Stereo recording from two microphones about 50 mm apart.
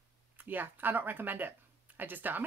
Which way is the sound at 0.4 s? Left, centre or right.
Right.